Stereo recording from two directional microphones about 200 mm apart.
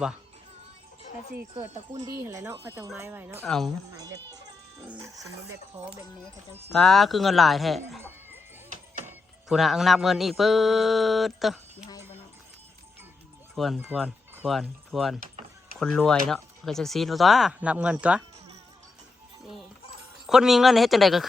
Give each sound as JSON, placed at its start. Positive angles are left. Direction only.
{"t": 1.9, "sound": "speech", "side_deg": -15}
{"t": 3.4, "sound": "speech", "side_deg": 0}
{"t": 3.9, "sound": "speech", "side_deg": -20}
{"t": 6.7, "sound": "speech", "side_deg": 0}
{"t": 9.5, "sound": "speech", "side_deg": 0}
{"t": 13.6, "sound": "speech", "side_deg": 0}
{"t": 20.2, "sound": "speech", "side_deg": 0}